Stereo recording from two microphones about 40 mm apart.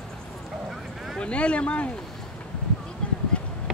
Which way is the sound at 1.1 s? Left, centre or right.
Left.